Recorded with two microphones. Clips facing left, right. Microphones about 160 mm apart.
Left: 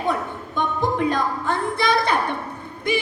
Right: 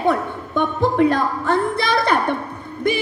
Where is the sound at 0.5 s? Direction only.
55° right (ahead or behind).